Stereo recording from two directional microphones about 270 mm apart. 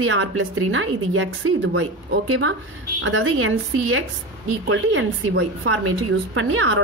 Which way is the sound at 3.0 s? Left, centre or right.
Right.